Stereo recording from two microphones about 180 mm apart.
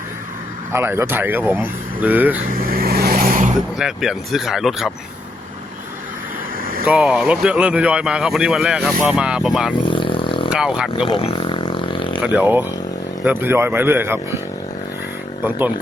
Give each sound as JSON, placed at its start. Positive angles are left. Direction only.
{"t": 0.7, "sound": "speech", "side_deg": -15}
{"t": 2.6, "sound": "vehicle", "side_deg": -55}
{"t": 3.8, "sound": "speech", "side_deg": -5}
{"t": 6.8, "sound": "speech", "side_deg": -5}
{"t": 9.8, "sound": "vehicle", "side_deg": 25}
{"t": 10.5, "sound": "speech", "side_deg": -5}
{"t": 10.9, "sound": "a sound", "side_deg": 30}
{"t": 12.2, "sound": "speech", "side_deg": -10}
{"t": 15.4, "sound": "speech", "side_deg": -10}